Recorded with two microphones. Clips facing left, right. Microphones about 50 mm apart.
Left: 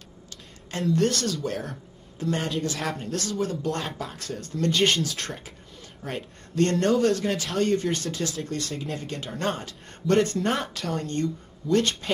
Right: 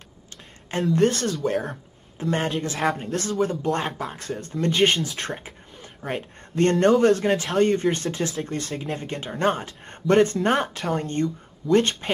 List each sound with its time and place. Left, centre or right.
0.9 s speech: right
6.5 s speech: right